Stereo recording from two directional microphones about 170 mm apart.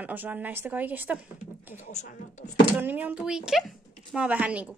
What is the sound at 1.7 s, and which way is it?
Speech, 45° left (ahead or behind).